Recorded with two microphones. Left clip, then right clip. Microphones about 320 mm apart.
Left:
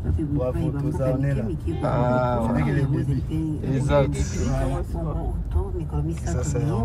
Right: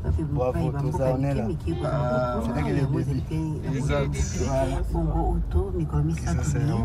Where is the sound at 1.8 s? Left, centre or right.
Centre.